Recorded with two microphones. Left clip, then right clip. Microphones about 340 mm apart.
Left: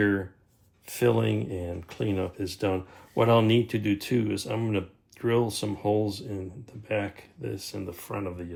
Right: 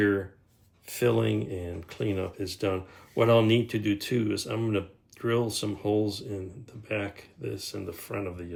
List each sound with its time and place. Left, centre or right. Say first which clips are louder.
0.9 s speech: left 1 dB; centre